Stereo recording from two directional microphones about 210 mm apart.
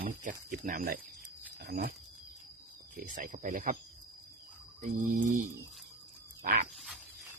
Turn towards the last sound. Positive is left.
turn(degrees=-40)  # may be behind; listen again after turning